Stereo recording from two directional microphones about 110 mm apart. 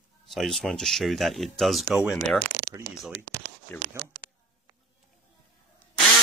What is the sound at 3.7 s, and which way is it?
Speech, 15° left (ahead or behind).